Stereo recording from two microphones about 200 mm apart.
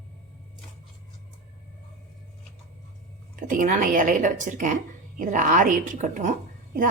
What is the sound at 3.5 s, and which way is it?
A woman's voice, 40° right (ahead or behind).